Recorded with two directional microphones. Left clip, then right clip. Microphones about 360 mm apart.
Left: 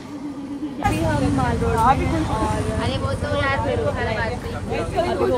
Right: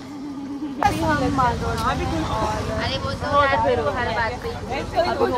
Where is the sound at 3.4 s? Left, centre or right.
Centre.